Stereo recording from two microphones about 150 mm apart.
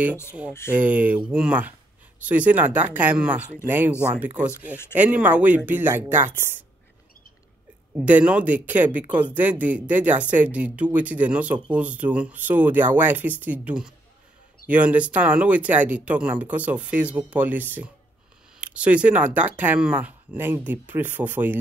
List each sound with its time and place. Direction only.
0.5 s speech: 15° left (ahead or behind)
0.7 s speech: 10° right (ahead or behind)
7.9 s speech: 10° right (ahead or behind)